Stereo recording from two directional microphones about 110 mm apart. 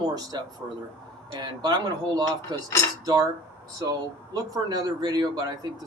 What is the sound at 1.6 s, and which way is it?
Speech, 40° right (ahead or behind).